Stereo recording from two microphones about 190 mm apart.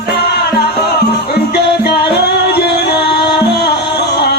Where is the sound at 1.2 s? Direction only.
55° left (ahead or behind).